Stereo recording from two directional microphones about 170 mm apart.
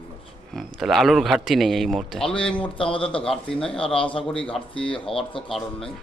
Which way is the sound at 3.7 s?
35° left (ahead or behind).